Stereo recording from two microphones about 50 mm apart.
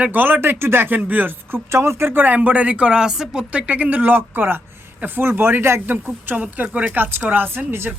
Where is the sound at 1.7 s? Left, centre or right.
Right.